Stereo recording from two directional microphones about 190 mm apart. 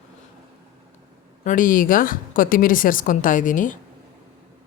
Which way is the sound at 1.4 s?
45° left (ahead or behind).